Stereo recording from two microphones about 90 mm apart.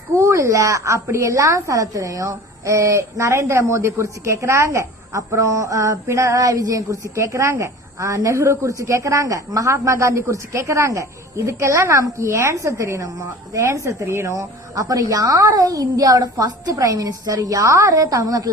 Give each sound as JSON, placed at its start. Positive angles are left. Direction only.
{"t": 0.2, "sound": "a woman's voice", "side_deg": -35}